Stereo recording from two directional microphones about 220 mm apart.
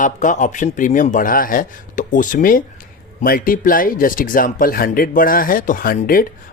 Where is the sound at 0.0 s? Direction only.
35° left (ahead or behind).